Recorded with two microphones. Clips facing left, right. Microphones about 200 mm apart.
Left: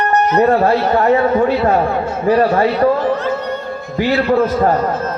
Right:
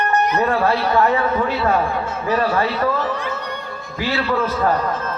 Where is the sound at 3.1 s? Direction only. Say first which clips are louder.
Left 8 dB; 45° left (ahead or behind).